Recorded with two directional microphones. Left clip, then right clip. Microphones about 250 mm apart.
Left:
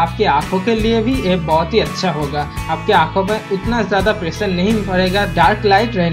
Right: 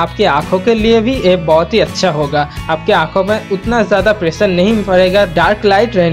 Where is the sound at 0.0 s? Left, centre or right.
Right.